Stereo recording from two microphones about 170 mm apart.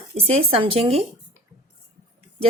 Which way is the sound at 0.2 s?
35° right (ahead or behind).